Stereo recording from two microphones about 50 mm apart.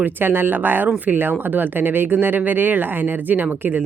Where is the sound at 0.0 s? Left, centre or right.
Right.